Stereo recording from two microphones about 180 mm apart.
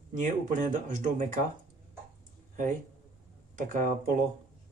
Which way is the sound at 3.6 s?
45° right (ahead or behind).